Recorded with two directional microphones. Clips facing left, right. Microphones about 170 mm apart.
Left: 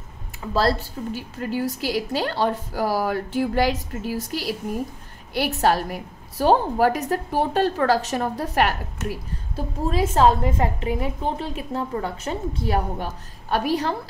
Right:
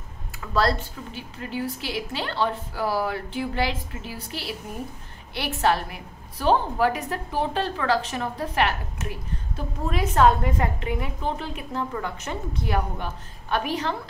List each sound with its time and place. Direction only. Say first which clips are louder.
0.4 s a woman's voice: left 2 dB; 30° left (ahead or behind)